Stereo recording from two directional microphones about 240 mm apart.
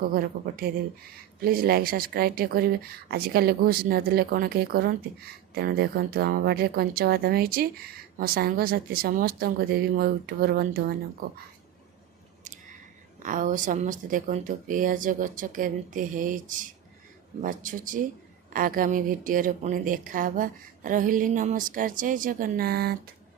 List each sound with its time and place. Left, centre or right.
0.1 s speech: right
13.2 s speech: right